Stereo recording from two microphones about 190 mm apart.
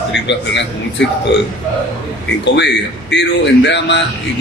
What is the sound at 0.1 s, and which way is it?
Speech, 65° left (ahead or behind).